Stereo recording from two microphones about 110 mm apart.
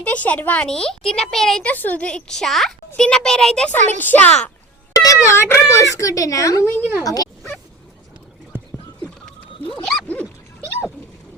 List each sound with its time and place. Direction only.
0.0 s speech: 15° left (ahead or behind)
1.7 s speech: 15° left (ahead or behind)
4.9 s speech: 30° left (ahead or behind)
8.5 s clip-clop: 20° right (ahead or behind)
9.5 s wild animals: 55° left (ahead or behind)
9.8 s dog: 10° left (ahead or behind)